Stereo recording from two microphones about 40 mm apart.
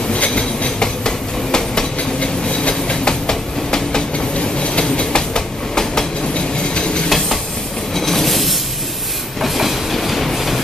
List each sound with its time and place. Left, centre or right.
0.1 s train: left
7.1 s train: centre